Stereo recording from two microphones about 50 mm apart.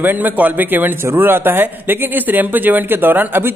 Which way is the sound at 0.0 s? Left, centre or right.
Right.